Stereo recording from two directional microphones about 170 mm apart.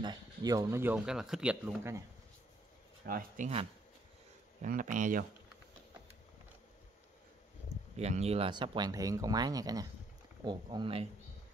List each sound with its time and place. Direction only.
0.0 s speech: 25° right (ahead or behind)
3.1 s speech: 55° right (ahead or behind)
4.6 s speech: 50° right (ahead or behind)
7.9 s speech: 40° right (ahead or behind)